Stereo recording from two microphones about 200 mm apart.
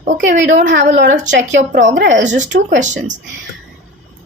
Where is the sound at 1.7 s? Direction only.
40° right (ahead or behind).